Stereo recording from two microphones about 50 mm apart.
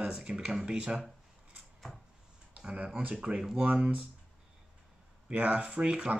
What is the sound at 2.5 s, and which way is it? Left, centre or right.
Speech, right.